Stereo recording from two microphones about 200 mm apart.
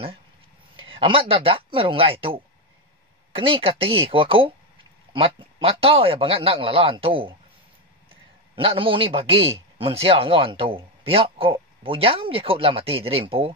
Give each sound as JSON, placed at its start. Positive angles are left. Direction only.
{"t": 0.7, "sound": "a man's voice", "side_deg": -25}